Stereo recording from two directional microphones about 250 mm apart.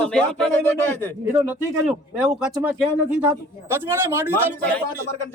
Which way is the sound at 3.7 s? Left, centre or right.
Centre.